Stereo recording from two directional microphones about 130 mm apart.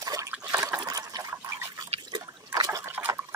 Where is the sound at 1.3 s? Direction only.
20° right (ahead or behind).